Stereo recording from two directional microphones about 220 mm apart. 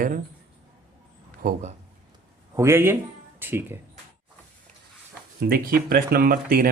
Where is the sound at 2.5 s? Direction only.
10° right (ahead or behind).